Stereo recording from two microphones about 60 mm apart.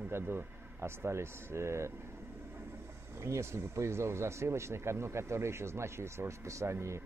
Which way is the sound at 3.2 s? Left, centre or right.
Right.